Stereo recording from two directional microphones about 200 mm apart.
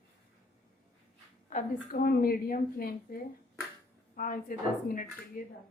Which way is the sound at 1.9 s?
50° left (ahead or behind).